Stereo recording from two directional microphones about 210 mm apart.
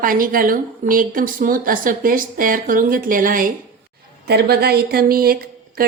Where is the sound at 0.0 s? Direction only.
40° right (ahead or behind).